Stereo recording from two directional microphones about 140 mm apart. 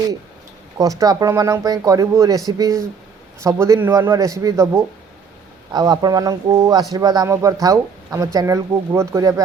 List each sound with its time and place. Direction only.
0.8 s speech: 25° right (ahead or behind)